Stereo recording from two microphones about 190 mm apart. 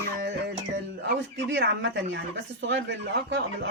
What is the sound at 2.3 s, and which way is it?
Speech, 65° right (ahead or behind).